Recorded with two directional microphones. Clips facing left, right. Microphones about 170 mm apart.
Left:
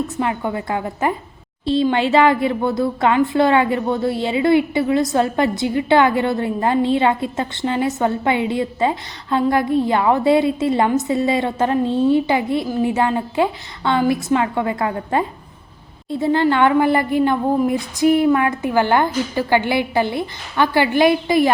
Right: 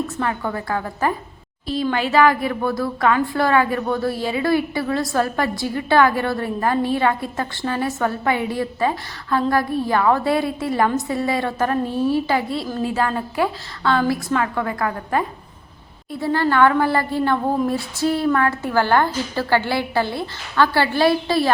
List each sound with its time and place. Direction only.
0.2 s a woman's voice: 20° left (ahead or behind)